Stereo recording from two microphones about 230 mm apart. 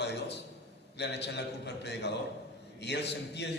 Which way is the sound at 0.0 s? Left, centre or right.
Left.